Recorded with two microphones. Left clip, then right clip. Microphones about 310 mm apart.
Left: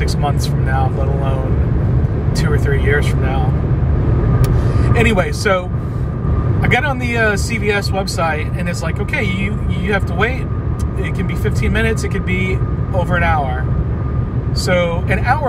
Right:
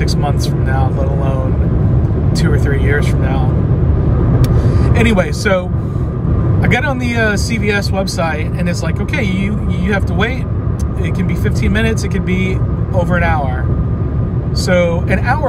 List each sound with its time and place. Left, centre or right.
0.0 s speech: centre
2.3 s speech: centre
4.4 s vehicle: centre
6.6 s speech: centre
13.1 s speech: centre
14.7 s speech: centre